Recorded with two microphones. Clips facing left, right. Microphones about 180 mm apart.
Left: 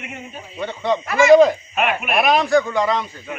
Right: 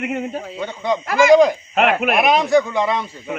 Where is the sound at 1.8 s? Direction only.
85° right.